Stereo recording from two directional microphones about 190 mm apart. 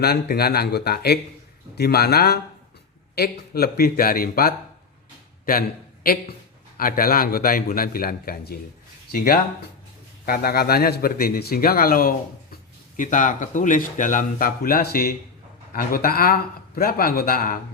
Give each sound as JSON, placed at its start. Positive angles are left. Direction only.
{"t": 0.0, "sound": "a man's voice", "side_deg": 55}